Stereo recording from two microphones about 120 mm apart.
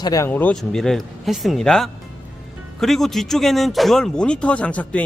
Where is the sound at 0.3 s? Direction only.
15° left (ahead or behind).